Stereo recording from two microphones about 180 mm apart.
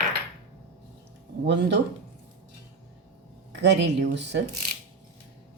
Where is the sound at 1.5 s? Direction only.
75° right (ahead or behind).